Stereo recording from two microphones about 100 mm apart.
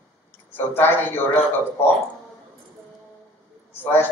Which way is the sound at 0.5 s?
20° left (ahead or behind).